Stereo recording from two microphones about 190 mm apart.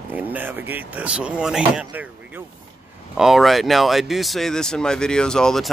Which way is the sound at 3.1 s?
Centre (ahead or behind).